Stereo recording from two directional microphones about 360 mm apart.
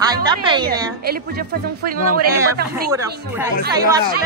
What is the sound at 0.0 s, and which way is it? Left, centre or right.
Speech, centre.